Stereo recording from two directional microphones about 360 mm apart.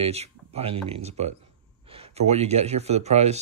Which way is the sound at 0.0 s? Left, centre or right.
Centre.